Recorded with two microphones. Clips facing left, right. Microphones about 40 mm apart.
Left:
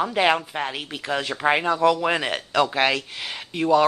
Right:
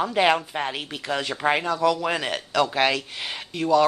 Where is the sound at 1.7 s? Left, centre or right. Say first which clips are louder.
Left 3 dB; left.